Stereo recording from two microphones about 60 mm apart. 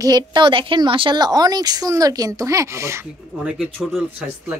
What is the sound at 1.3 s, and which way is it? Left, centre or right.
Speech, right.